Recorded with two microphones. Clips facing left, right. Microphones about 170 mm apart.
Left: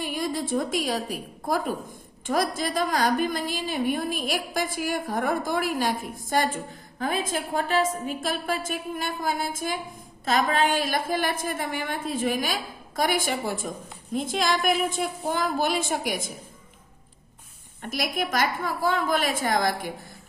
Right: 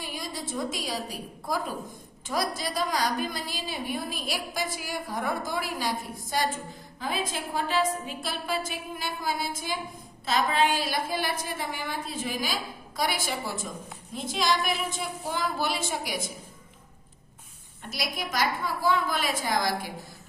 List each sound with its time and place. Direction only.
0.0 s a woman's voice: 55° left (ahead or behind)
17.8 s a woman's voice: 50° left (ahead or behind)